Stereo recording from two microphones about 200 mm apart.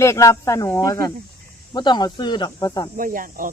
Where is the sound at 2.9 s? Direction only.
45° right (ahead or behind).